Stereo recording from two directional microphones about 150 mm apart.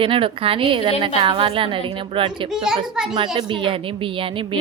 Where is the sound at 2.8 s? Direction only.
Centre (ahead or behind).